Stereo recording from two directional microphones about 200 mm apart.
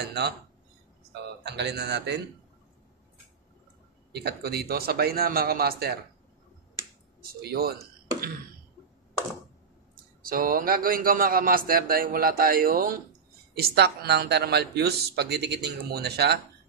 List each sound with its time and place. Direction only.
0.2 s speech: 60° right (ahead or behind)
1.4 s speech: 55° right (ahead or behind)
4.1 s a man's voice: 50° right (ahead or behind)
7.2 s a man's voice: 50° right (ahead or behind)
10.2 s a man's voice: 45° right (ahead or behind)